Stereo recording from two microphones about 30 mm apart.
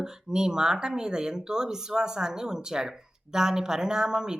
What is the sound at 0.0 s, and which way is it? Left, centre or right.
Speech, right.